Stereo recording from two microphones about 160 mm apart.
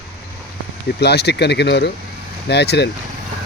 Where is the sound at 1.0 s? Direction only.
90° left.